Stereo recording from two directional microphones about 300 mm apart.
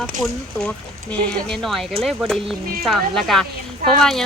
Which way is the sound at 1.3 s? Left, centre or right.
Centre.